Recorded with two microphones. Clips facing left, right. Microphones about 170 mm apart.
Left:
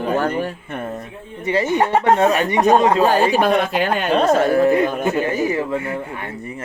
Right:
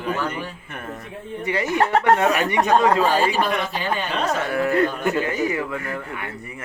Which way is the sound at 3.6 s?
55° left (ahead or behind).